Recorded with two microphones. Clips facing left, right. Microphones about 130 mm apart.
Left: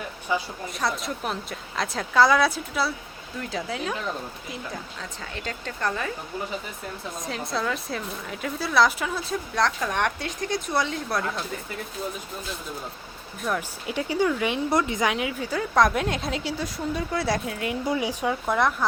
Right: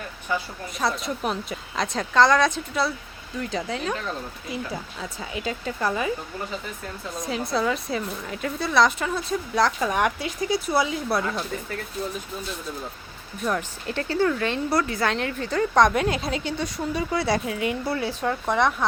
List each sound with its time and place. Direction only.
0.3 s speech: 15° left (ahead or behind)
0.7 s speech: centre (ahead or behind)
7.2 s speech: centre (ahead or behind)
13.4 s speech: 5° left (ahead or behind)
17.8 s speech: 15° left (ahead or behind)